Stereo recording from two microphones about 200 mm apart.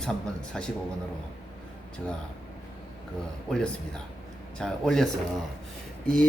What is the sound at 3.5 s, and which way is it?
A man's voice, 5° left (ahead or behind).